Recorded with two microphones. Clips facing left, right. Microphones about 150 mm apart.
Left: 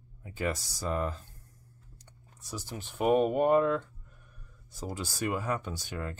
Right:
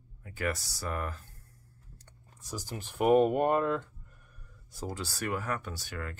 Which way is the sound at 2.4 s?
Centre (ahead or behind).